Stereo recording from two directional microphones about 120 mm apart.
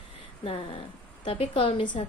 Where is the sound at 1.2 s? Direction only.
50° left (ahead or behind).